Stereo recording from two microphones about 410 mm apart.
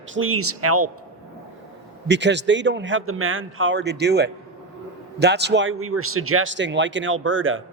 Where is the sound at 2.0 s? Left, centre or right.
Right.